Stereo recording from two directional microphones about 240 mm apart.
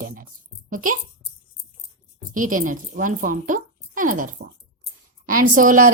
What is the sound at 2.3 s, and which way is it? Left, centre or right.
A woman's voice, right.